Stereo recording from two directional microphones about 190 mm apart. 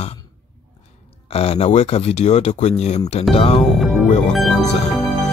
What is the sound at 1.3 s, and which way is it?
Speech, 30° left (ahead or behind).